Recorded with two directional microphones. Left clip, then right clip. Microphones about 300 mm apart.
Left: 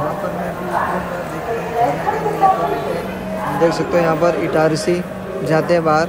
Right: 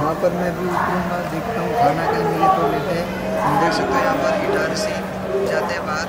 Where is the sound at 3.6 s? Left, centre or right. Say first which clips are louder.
Left 3 dB; centre.